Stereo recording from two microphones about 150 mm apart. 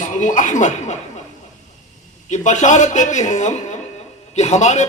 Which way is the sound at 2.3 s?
55° left (ahead or behind).